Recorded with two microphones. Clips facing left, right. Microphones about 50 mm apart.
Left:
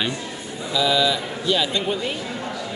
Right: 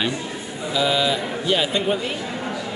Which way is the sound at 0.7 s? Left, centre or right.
Right.